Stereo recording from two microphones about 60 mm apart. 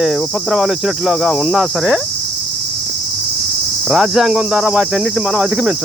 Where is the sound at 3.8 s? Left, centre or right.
Centre.